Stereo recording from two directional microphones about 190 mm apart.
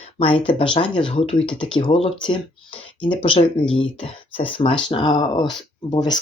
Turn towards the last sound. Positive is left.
turn(degrees=25)  # may be behind; listen again after turning